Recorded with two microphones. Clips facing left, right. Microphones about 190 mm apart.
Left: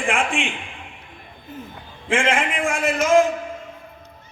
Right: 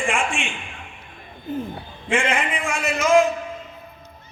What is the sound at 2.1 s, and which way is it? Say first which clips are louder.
Speech: left 1 dB; 90° left.